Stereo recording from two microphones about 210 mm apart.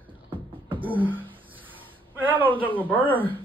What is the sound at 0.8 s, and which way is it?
Beatboxing, 10° right (ahead or behind).